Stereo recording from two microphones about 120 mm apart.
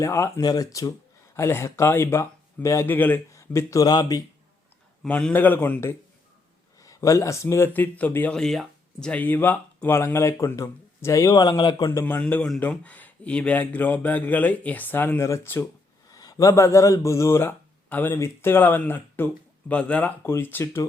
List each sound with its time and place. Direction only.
0.0 s speech: 25° left (ahead or behind)
5.0 s speech: 10° left (ahead or behind)
6.8 s speech: 25° left (ahead or behind)
11.9 s speech: 20° left (ahead or behind)
16.0 s speech: 30° left (ahead or behind)